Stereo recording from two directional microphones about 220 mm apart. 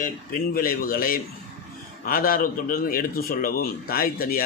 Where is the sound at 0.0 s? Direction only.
40° left (ahead or behind).